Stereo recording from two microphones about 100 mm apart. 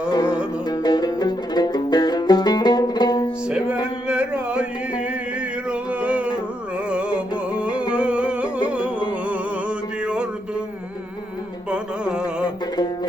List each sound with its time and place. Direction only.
0.7 s music: 45° left (ahead or behind)
4.1 s a sound: 10° right (ahead or behind)
6.0 s music: 10° right (ahead or behind)
7.6 s music: 10° right (ahead or behind)
11.7 s carnatic music: 10° right (ahead or behind)